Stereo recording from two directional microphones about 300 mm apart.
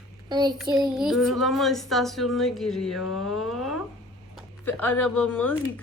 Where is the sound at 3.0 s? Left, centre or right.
Left.